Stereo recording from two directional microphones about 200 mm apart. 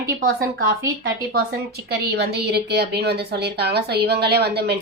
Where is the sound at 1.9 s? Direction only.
55° right (ahead or behind).